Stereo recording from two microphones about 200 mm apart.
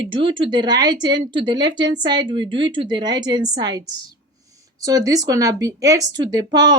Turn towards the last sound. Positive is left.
turn(degrees=-20)  # may be behind; listen again after turning